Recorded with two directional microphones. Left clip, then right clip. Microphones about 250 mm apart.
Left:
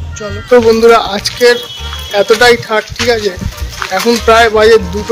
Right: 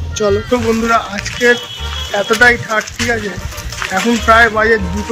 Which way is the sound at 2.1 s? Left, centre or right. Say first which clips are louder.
Left 4 dB; centre.